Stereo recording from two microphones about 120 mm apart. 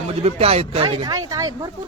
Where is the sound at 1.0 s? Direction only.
30° right (ahead or behind).